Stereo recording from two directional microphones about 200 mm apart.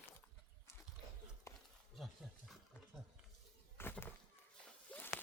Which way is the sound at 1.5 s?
15° left (ahead or behind).